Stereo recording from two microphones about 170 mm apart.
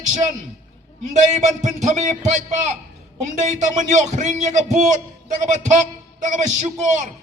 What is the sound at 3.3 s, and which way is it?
Speech, 45° right (ahead or behind).